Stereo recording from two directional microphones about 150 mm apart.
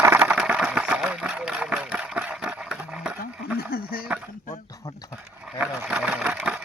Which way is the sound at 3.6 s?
85° left.